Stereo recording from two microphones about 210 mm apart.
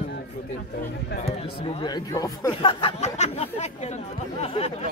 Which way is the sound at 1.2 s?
30° left (ahead or behind).